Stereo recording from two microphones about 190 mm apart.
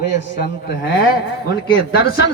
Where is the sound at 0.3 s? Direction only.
55° left (ahead or behind).